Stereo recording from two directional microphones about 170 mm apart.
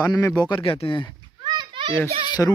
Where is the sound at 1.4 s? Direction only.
25° right (ahead or behind).